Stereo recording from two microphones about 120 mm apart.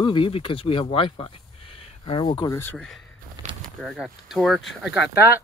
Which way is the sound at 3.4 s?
40° right (ahead or behind).